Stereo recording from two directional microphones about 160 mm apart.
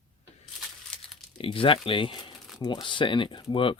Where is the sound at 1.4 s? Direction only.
35° left (ahead or behind).